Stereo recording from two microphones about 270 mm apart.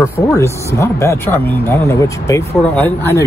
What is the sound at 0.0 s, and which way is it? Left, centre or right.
Speech, centre.